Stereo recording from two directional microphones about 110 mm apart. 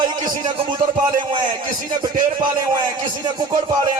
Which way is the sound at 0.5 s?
55° right (ahead or behind).